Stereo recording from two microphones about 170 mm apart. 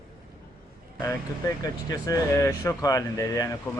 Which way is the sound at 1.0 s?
20° left (ahead or behind).